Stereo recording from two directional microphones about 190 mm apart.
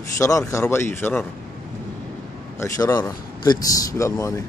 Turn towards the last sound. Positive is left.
turn(degrees=15)  # may be behind; listen again after turning